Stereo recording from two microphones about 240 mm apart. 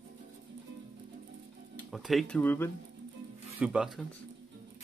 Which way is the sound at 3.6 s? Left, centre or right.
Centre.